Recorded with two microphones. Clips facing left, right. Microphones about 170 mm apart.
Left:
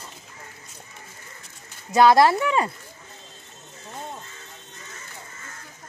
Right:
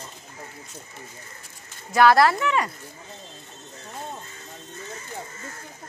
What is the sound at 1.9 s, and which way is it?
Speech, 20° left (ahead or behind).